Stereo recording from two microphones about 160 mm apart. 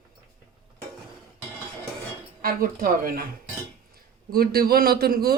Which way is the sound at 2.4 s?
65° right (ahead or behind).